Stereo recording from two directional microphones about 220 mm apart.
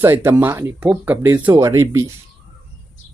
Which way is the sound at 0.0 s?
10° right (ahead or behind).